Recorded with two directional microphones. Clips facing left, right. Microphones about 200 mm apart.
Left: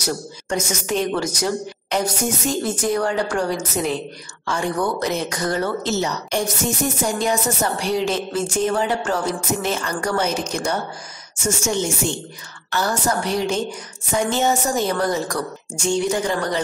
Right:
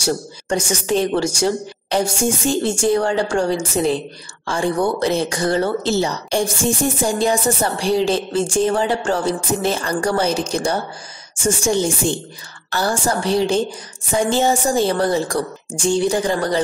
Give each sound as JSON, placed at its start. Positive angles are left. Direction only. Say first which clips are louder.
{"t": 0.0, "sound": "a woman's voice", "louder": "right 4 dB", "side_deg": -30}